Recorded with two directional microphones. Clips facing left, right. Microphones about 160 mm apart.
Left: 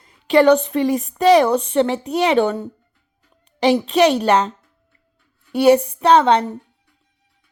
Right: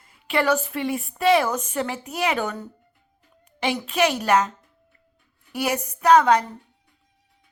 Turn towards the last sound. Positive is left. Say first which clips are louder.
# left 3 dB
turn(degrees=30)  # may be behind; listen again after turning